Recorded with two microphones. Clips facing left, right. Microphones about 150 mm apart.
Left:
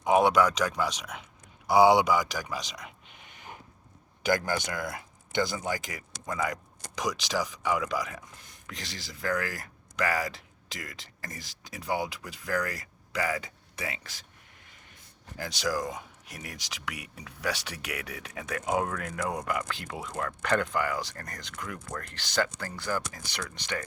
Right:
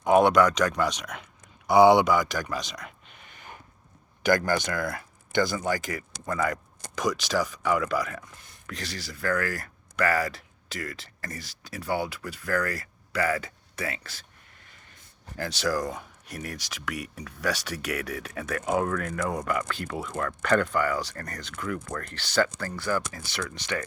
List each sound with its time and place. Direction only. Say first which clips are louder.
0.0 s speech: right 3 dB; 10° left (ahead or behind)
15.4 s speech: right 3 dB; 15° left (ahead or behind)